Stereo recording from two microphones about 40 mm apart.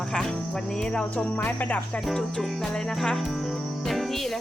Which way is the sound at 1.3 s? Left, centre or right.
Left.